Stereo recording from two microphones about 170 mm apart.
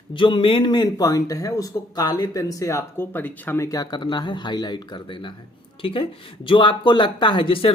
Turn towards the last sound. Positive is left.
turn(degrees=30)  # may be behind; listen again after turning